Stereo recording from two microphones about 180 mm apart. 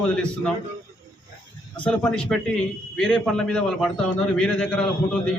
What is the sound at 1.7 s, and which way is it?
A man's voice, 5° left (ahead or behind).